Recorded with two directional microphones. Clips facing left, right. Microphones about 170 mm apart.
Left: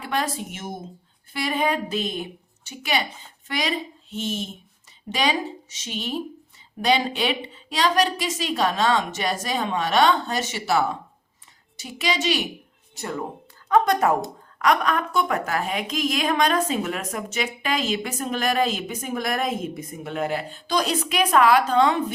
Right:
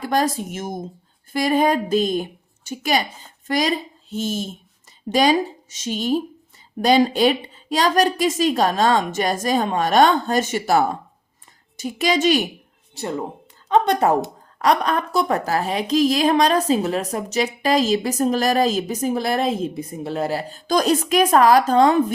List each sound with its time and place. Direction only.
0.0 s a woman's voice: 40° right (ahead or behind)
13.0 s a woman's voice: 25° right (ahead or behind); by 22.0 s 40° right (ahead or behind)